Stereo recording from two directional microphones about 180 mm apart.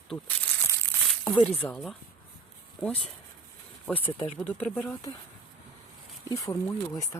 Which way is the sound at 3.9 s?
30° left (ahead or behind).